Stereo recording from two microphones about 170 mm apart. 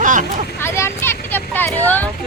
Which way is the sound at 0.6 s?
15° left (ahead or behind).